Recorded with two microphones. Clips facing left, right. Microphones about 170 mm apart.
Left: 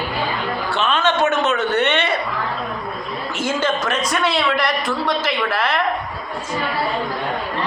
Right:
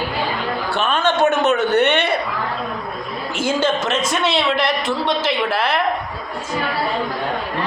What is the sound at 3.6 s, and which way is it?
A woman's voice, 25° right (ahead or behind).